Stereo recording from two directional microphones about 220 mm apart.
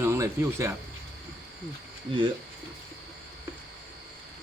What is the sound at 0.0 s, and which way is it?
Speech, 10° right (ahead or behind).